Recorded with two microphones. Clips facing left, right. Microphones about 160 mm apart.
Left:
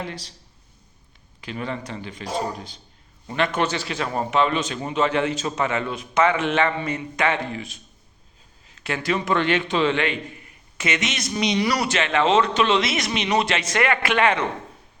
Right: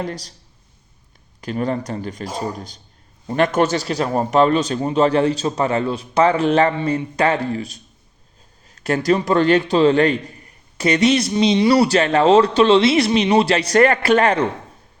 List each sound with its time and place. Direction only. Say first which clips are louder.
0.0 s speech: right 6 dB; 40° right (ahead or behind)
1.4 s speech: right 8 dB; 40° right (ahead or behind)